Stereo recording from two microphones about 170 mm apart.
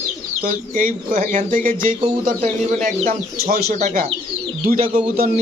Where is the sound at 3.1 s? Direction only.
55° right (ahead or behind).